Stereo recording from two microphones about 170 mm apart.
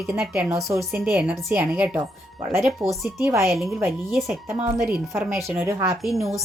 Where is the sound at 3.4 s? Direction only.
Centre (ahead or behind).